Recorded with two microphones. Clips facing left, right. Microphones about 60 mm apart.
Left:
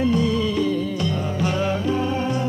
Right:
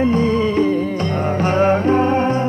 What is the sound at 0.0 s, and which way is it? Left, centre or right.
Music, right.